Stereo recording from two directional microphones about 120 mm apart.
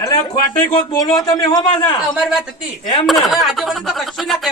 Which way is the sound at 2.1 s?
5° right (ahead or behind).